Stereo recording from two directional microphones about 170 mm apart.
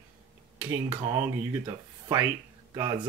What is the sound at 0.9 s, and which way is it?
Speech, 30° right (ahead or behind).